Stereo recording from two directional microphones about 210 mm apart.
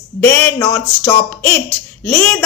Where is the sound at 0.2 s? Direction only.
10° left (ahead or behind).